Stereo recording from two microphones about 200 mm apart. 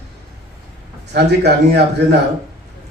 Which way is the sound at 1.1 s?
55° right (ahead or behind).